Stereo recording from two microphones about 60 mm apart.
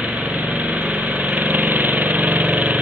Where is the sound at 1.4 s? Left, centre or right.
Right.